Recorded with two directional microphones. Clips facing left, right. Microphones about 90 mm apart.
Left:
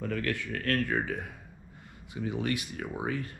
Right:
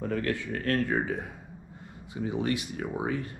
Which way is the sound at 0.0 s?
25° right (ahead or behind).